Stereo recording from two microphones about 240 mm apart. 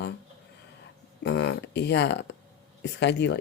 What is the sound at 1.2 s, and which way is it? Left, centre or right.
Speech, left.